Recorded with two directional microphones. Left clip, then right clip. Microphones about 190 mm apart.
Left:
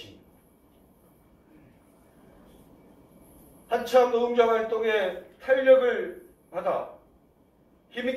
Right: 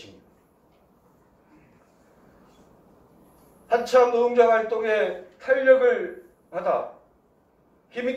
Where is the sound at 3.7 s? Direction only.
40° right (ahead or behind).